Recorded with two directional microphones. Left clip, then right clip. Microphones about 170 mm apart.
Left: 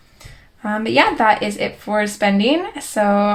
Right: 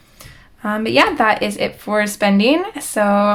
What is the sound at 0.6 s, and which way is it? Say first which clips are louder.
Speech: right 1 dB; 30° right (ahead or behind).